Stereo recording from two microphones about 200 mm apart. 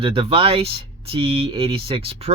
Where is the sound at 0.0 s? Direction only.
25° right (ahead or behind).